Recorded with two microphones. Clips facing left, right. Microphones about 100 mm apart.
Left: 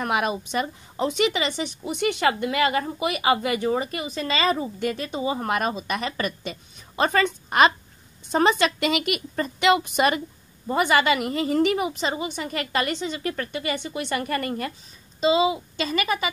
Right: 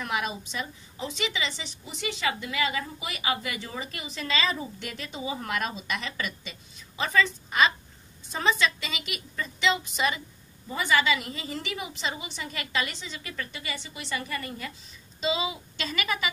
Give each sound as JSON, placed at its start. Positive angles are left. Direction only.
{"t": 0.0, "sound": "a woman's voice", "side_deg": 55}